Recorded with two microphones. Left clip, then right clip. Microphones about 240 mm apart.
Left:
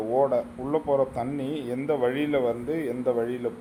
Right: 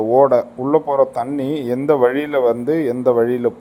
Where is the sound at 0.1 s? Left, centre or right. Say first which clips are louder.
Right 10 dB; right.